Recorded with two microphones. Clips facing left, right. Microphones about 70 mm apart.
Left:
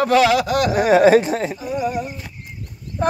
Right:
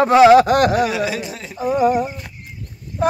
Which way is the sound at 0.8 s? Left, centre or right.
Left.